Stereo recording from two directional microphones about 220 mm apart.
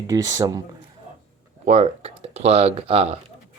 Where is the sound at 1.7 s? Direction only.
30° right (ahead or behind).